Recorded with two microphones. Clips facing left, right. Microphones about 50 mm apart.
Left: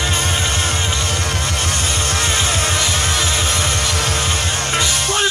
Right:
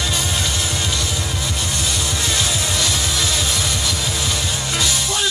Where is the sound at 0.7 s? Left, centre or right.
Left.